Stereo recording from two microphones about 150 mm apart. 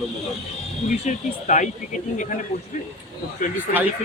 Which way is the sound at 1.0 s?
55° left (ahead or behind).